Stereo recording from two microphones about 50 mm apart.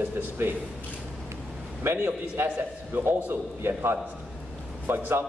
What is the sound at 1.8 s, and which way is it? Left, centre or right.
A man's voice, right.